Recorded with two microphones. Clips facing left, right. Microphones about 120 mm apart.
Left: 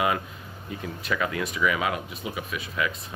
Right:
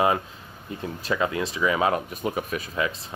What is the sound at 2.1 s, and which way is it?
Speech, 45° right (ahead or behind).